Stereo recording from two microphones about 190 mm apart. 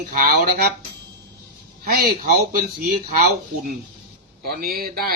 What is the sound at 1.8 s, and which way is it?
Speech, 50° right (ahead or behind).